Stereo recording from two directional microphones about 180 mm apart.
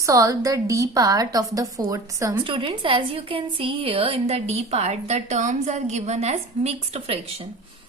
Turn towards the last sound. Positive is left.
turn(degrees=-35)  # may be behind; listen again after turning